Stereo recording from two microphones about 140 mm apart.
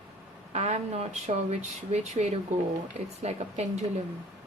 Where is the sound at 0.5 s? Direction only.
50° right (ahead or behind).